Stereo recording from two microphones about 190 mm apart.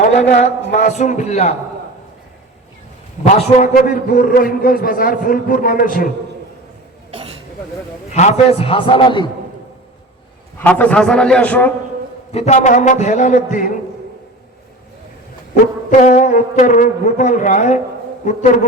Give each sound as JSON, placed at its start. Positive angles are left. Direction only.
{"t": 0.7, "sound": "a man's voice", "side_deg": 40}
{"t": 3.3, "sound": "a man's voice", "side_deg": 40}
{"t": 8.1, "sound": "a man's voice", "side_deg": 35}
{"t": 10.6, "sound": "a man's voice", "side_deg": 5}
{"t": 12.3, "sound": "a man's voice", "side_deg": 35}
{"t": 15.9, "sound": "a man's voice", "side_deg": 40}